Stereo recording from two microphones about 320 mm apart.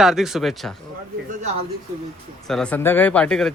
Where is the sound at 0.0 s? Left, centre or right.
Centre.